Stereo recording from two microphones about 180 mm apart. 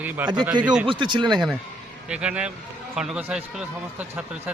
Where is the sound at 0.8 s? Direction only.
25° right (ahead or behind).